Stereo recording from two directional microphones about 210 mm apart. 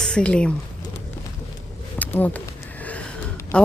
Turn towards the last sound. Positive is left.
turn(degrees=5)  # may be behind; listen again after turning